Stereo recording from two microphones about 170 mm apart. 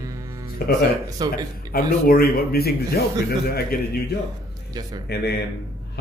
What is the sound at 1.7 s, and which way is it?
Speech, 60° left (ahead or behind).